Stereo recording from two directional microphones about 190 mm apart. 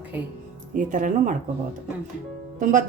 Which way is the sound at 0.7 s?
40° right (ahead or behind).